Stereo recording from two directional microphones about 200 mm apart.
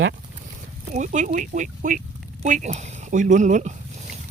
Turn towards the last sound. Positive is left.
turn(degrees=-35)  # may be behind; listen again after turning